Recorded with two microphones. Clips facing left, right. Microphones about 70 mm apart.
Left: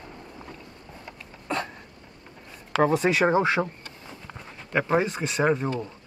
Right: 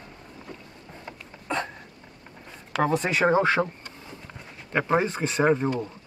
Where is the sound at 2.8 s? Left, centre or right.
Centre.